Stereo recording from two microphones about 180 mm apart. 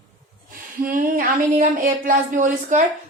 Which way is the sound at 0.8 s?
50° right (ahead or behind).